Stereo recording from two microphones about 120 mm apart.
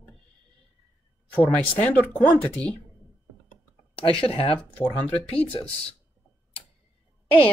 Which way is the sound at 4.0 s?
50° left (ahead or behind).